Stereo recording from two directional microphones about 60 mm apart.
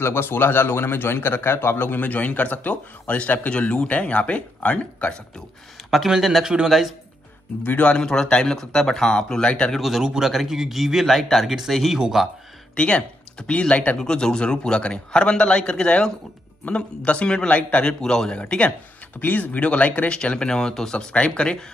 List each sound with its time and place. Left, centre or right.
0.0 s speech: left
5.9 s speech: centre
7.6 s speech: left
9.8 s speech: centre
12.7 s speech: centre
19.1 s speech: left